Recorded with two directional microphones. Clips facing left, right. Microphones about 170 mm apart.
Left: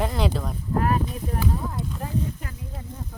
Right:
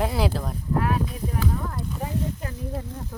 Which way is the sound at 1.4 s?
15° left (ahead or behind).